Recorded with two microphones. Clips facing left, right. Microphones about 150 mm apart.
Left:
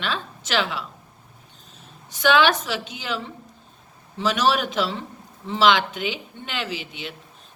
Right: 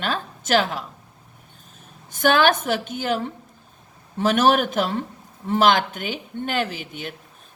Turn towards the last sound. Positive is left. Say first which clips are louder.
# right 2 dB
turn(degrees=-50)  # may be behind; listen again after turning